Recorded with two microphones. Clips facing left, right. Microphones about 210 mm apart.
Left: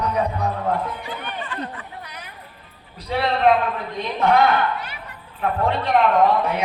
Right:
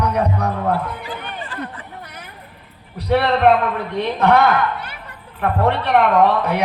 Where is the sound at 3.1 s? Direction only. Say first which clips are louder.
Right 4 dB; 65° right (ahead or behind).